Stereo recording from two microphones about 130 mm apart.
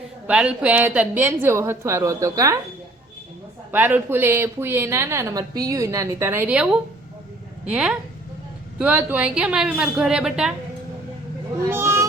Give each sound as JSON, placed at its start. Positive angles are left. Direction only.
{"t": 0.3, "sound": "a woman's voice", "side_deg": -10}
{"t": 3.7, "sound": "a woman's voice", "side_deg": -15}
{"t": 11.7, "sound": "speech", "side_deg": -20}